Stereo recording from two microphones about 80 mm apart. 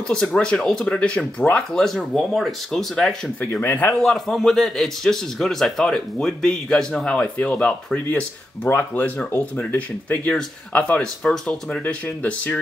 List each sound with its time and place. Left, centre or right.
0.1 s a man's voice: centre
3.6 s speech: left
4.0 s a man's voice: centre
11.8 s speech: left